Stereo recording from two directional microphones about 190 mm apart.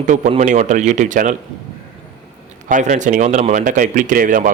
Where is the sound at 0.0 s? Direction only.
40° right (ahead or behind).